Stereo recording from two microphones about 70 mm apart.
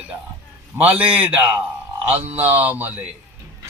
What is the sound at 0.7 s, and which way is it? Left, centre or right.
Speech, right.